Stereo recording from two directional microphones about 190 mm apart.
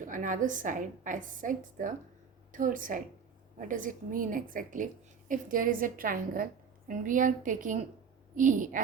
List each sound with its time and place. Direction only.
0.0 s a woman's voice: 45° right (ahead or behind)